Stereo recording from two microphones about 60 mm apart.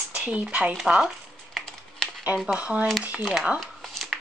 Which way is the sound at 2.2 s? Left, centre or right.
Centre.